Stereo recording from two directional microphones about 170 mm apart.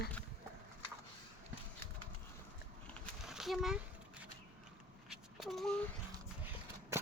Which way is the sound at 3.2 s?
Centre (ahead or behind).